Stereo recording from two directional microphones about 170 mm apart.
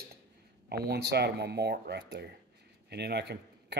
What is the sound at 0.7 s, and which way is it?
Speech, 70° right (ahead or behind).